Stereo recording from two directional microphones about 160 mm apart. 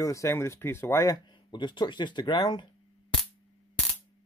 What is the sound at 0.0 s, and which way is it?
Speech, 20° left (ahead or behind).